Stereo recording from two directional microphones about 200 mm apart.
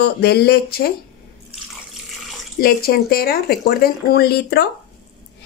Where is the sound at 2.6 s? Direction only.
50° left (ahead or behind).